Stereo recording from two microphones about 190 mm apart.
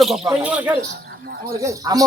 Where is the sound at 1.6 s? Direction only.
20° right (ahead or behind).